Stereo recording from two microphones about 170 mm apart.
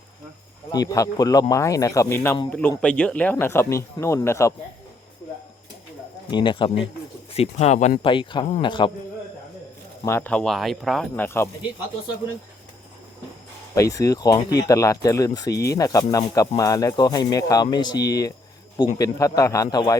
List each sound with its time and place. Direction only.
0.7 s speech: 25° left (ahead or behind)
6.3 s speech: 30° left (ahead or behind)
8.0 s speech: 30° left (ahead or behind)
10.1 s speech: 10° left (ahead or behind)
13.7 s speech: 20° left (ahead or behind)